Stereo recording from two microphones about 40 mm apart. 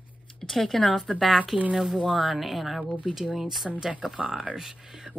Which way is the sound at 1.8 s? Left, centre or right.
Centre.